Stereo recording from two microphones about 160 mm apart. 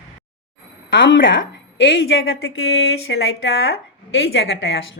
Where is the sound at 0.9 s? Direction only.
90° left.